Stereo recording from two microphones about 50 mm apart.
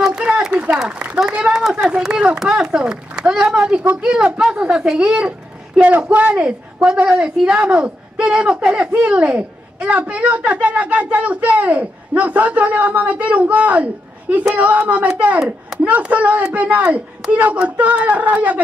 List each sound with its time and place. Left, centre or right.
0.5 s a sound: right
1.1 s a man's voice: centre
5.8 s a man's voice: right